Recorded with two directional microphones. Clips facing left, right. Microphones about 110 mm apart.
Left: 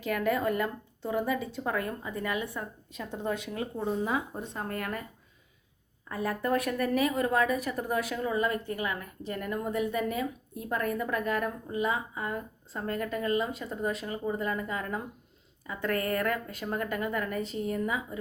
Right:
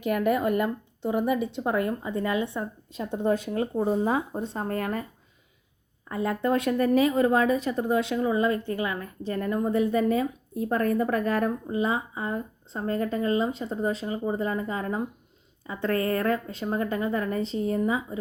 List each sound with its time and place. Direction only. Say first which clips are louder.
0.0 s speech: right 4 dB; 20° right (ahead or behind)
6.1 s speech: right 4 dB; 25° right (ahead or behind)